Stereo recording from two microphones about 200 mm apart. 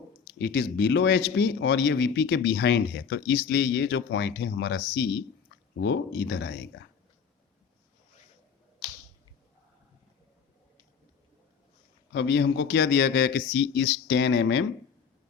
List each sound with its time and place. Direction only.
0.3 s speech: 55° left (ahead or behind)
12.1 s speech: 60° left (ahead or behind)